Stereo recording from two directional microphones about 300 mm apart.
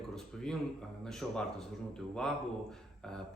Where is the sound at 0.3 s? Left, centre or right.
Centre.